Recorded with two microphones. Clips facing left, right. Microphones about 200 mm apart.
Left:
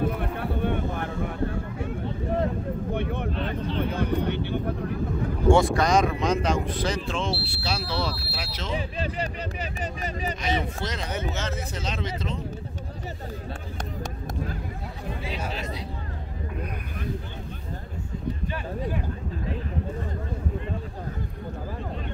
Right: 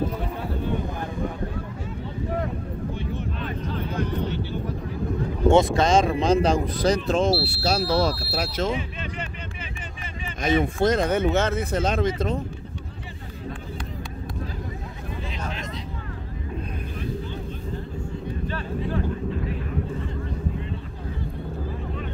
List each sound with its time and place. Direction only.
0.0 s a sound: 60° left (ahead or behind)
2.9 s vehicle: 60° left (ahead or behind)
5.5 s speech: 20° right (ahead or behind); by 8.7 s 50° right (ahead or behind)
8.7 s speech: 35° left (ahead or behind)
10.4 s speech: 50° right (ahead or behind)
15.2 s a sound: 10° left (ahead or behind)